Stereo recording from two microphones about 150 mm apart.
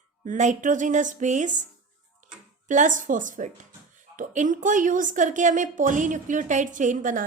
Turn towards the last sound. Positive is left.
turn(degrees=-60)  # may be behind; listen again after turning